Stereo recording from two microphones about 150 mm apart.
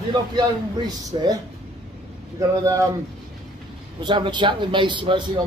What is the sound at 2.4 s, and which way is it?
Speech, 20° right (ahead or behind).